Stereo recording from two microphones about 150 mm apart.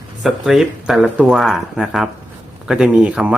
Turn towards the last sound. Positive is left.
turn(degrees=-5)  # may be behind; listen again after turning